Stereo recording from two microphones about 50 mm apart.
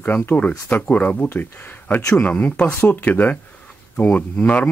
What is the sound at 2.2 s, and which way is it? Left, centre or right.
Speech, left.